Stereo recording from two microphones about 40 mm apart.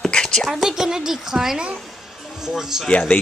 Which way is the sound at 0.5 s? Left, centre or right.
Centre.